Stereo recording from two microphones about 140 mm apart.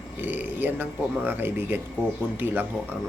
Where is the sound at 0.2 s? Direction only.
15° right (ahead or behind).